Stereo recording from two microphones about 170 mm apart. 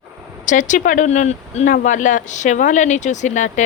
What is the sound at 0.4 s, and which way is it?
Speech, 45° left (ahead or behind).